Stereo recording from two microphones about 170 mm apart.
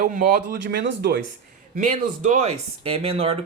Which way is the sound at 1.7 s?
50° right (ahead or behind).